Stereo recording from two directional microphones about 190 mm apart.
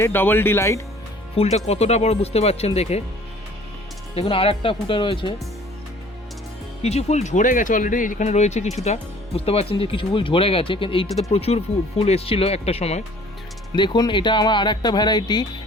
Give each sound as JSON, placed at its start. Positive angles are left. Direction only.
{"t": 0.0, "sound": "speech", "side_deg": 10}
{"t": 1.4, "sound": "speech", "side_deg": 35}
{"t": 4.1, "sound": "speech", "side_deg": 30}
{"t": 6.8, "sound": "speech", "side_deg": 35}
{"t": 13.7, "sound": "speech", "side_deg": 25}